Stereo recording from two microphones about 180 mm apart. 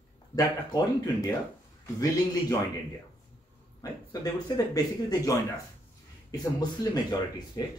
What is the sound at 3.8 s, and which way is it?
Speech, 20° left (ahead or behind).